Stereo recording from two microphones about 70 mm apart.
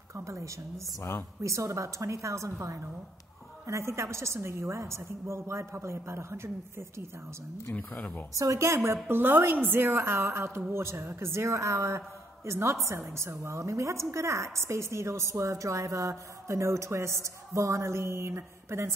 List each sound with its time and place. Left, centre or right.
0.1 s a woman's voice: right
7.7 s speech: left
8.4 s a woman's voice: right